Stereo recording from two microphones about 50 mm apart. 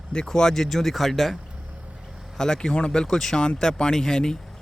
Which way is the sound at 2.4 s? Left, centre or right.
Centre.